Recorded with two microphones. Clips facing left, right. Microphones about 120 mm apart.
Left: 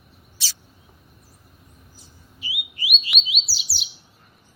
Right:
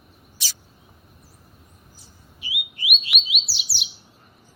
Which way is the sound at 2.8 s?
Centre (ahead or behind).